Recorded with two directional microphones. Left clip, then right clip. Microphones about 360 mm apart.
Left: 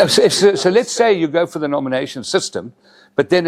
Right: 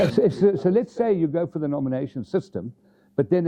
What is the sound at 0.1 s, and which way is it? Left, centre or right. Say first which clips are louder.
Speech: left 8 dB; centre.